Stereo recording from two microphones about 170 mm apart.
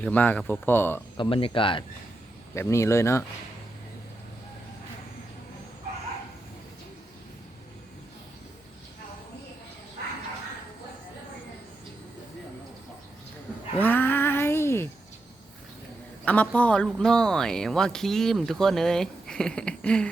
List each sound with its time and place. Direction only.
0.0 s speech: 10° left (ahead or behind)
1.1 s speech: 30° left (ahead or behind)
2.6 s speech: 15° left (ahead or behind)
13.7 s a sound: 10° left (ahead or behind)
16.2 s speech: 10° left (ahead or behind)